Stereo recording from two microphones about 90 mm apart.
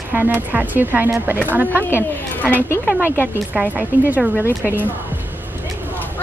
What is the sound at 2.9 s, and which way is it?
Speech, 20° right (ahead or behind).